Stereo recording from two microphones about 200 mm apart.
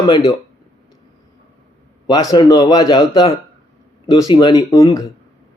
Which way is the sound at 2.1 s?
20° left (ahead or behind).